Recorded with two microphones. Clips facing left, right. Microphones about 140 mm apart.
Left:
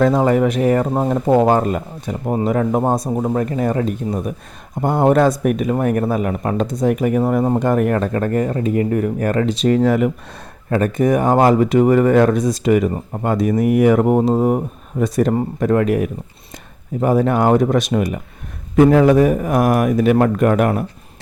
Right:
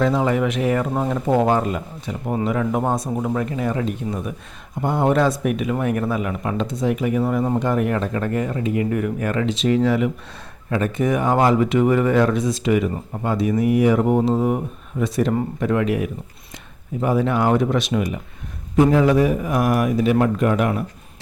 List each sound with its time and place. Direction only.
0.0 s speech: 45° left (ahead or behind)
18.8 s speech: 60° left (ahead or behind)